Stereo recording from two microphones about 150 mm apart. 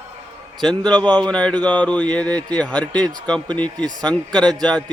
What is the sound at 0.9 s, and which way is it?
Speech, 30° right (ahead or behind).